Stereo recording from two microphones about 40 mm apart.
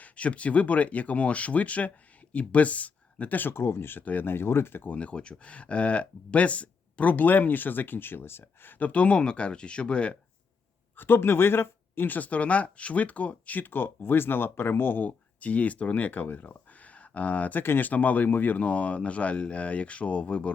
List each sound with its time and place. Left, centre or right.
0.0 s speech: left
3.5 s speech: left
4.0 s speech: left
4.3 s speech: left
4.9 s speech: left
8.8 s speech: left
10.9 s speech: left
12.1 s speech: left
13.7 s speech: left
15.0 s speech: left
18.6 s speech: left